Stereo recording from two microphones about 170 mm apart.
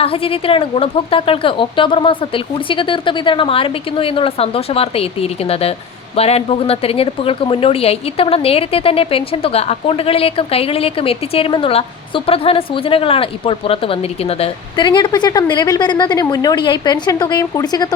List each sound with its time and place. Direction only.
0.0 s a woman's voice: 35° left (ahead or behind)